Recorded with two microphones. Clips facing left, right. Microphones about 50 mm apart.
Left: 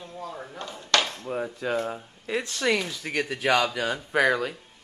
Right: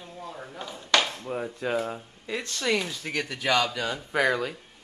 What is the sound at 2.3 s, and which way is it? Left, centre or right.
Speech, centre.